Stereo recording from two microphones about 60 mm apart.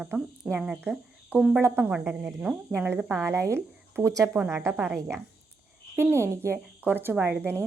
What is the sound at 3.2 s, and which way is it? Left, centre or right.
Speech, right.